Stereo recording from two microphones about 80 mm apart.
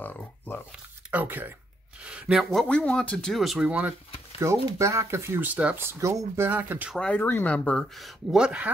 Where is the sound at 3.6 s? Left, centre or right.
Centre.